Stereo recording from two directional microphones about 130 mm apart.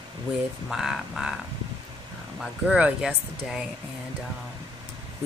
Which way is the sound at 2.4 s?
5° right (ahead or behind).